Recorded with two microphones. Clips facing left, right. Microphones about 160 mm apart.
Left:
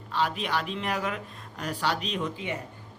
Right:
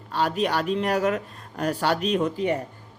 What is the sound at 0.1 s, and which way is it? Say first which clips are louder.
A woman's voice: right 5 dB; 45° right (ahead or behind).